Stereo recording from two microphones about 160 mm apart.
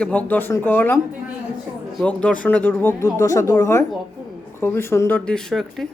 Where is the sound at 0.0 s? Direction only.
10° left (ahead or behind).